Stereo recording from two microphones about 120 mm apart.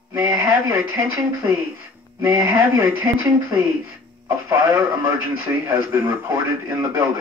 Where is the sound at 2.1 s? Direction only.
20° right (ahead or behind).